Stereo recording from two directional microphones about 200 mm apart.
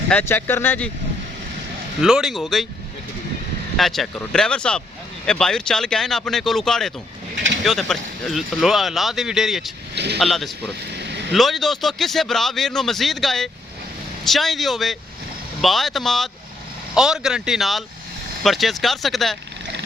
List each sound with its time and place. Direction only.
0.1 s speech: 10° left (ahead or behind)
2.0 s speech: centre (ahead or behind)
3.8 s speech: centre (ahead or behind)
7.3 s bird: 65° right (ahead or behind)
7.6 s speech: centre (ahead or behind)
9.9 s speech: 55° right (ahead or behind)
10.2 s speech: centre (ahead or behind)
10.9 s vehicle: 60° right (ahead or behind)
11.3 s speech: centre (ahead or behind)